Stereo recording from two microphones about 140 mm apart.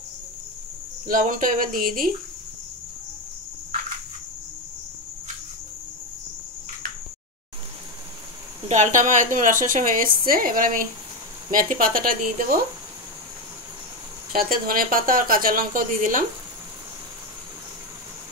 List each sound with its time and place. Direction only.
1.0 s speech: 75° right (ahead or behind); by 2.1 s 90° right
8.6 s a woman's voice: 60° right (ahead or behind); by 12.5 s 90° right
14.3 s a woman's voice: 90° right; by 16.3 s 75° right (ahead or behind)